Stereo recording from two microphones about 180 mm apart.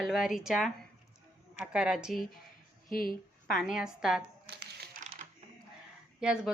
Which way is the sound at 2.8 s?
55° left (ahead or behind).